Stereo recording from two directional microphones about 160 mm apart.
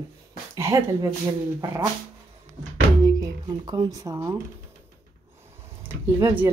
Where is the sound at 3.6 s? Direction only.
25° right (ahead or behind).